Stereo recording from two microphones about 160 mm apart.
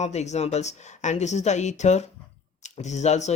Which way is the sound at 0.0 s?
45° left (ahead or behind).